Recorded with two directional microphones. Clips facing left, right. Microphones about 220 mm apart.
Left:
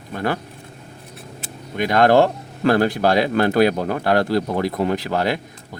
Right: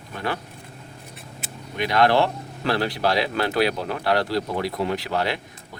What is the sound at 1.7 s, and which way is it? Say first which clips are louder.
Speech: left 5 dB; 50° left (ahead or behind).